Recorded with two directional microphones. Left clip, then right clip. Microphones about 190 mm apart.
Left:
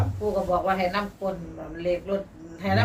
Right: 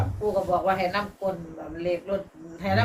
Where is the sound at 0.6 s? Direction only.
Centre (ahead or behind).